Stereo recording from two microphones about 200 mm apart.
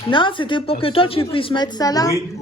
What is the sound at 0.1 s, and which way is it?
Speech, 25° left (ahead or behind).